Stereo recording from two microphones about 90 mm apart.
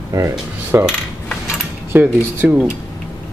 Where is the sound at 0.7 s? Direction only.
25° right (ahead or behind).